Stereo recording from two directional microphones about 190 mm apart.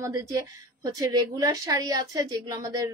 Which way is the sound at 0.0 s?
15° right (ahead or behind).